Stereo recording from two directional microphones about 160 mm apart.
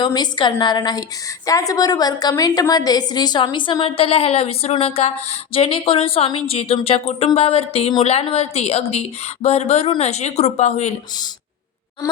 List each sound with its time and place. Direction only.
0.0 s a woman's voice: 25° left (ahead or behind); by 10.9 s 45° left (ahead or behind)